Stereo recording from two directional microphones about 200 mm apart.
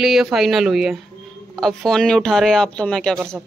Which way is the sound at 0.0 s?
Centre (ahead or behind).